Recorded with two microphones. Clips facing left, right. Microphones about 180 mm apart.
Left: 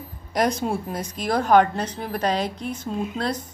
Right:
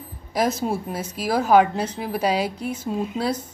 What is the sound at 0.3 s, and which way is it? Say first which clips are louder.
A woman's voice: even; 5° right (ahead or behind).